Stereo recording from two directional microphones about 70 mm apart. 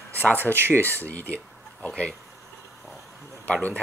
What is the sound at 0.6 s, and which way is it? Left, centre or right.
Speech, right.